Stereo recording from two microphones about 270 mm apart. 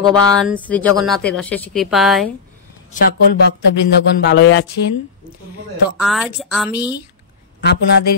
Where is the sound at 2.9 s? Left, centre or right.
Left.